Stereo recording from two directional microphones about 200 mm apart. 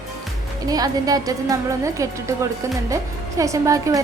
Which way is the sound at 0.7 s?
20° right (ahead or behind).